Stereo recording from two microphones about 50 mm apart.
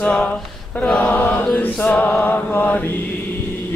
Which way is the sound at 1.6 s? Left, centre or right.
Left.